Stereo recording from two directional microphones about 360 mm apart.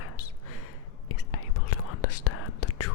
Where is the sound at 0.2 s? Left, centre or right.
Left.